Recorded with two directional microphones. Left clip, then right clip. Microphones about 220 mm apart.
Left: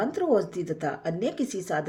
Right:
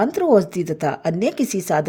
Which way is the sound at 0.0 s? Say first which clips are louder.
Right 8 dB; 45° right (ahead or behind).